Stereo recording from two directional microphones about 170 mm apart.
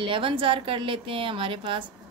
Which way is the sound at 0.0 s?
30° right (ahead or behind).